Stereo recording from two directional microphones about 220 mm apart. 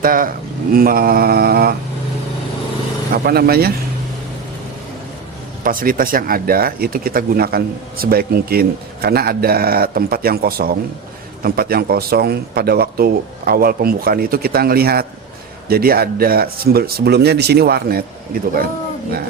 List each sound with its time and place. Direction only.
0.0 s speech: 40° right (ahead or behind)
3.2 s speech: 45° right (ahead or behind)
5.6 s speech: 40° right (ahead or behind)